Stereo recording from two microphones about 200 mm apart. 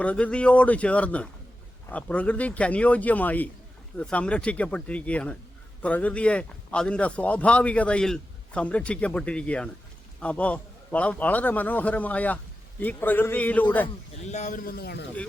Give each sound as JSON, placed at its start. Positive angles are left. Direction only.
{"t": 0.0, "sound": "a man's voice", "side_deg": 5}
{"t": 13.8, "sound": "a man's voice", "side_deg": 35}